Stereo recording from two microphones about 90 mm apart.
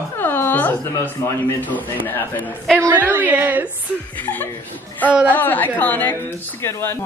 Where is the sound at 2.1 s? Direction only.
20° left (ahead or behind).